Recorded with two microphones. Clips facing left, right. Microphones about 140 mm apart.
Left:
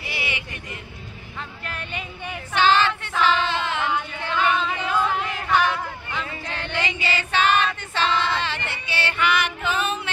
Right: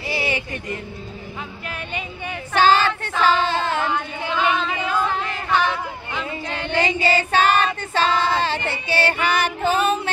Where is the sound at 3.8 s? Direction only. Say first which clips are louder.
Right 2 dB; 5° right (ahead or behind).